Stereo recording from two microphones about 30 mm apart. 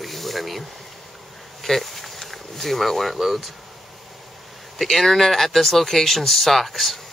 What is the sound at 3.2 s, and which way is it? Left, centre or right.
Speech, centre.